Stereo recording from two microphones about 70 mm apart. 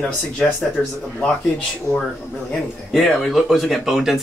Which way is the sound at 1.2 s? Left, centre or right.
Centre.